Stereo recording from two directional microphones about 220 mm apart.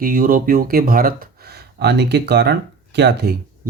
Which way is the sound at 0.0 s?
40° right (ahead or behind).